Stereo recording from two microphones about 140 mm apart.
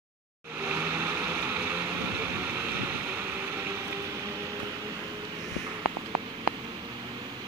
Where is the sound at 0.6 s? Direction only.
15° right (ahead or behind).